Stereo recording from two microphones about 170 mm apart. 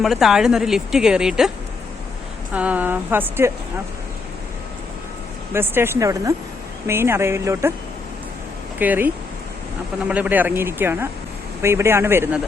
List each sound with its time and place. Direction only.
0.0 s speech: centre (ahead or behind)
2.5 s speech: 10° right (ahead or behind)
5.5 s speech: 15° right (ahead or behind)
8.8 s speech: 10° right (ahead or behind)